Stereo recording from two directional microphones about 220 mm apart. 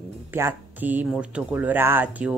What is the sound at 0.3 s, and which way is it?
A woman's voice, 10° right (ahead or behind).